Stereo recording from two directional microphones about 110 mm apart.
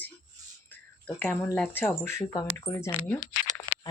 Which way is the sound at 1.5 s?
10° left (ahead or behind).